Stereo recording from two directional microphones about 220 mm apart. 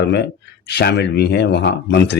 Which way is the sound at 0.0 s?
50° left (ahead or behind).